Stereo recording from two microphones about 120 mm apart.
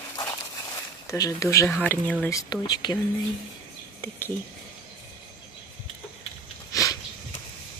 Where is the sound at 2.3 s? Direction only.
30° left (ahead or behind).